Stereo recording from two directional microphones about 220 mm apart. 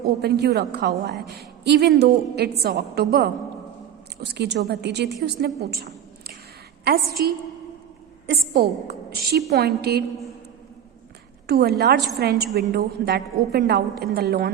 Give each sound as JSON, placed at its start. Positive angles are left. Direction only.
{"t": 0.0, "sound": "a woman's voice", "side_deg": -45}
{"t": 5.7, "sound": "a sound", "side_deg": -45}
{"t": 6.8, "sound": "a woman's voice", "side_deg": -45}
{"t": 11.4, "sound": "a woman's voice", "side_deg": -45}